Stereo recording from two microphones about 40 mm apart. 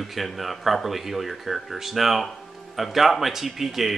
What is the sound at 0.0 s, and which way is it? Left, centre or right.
Speech, centre.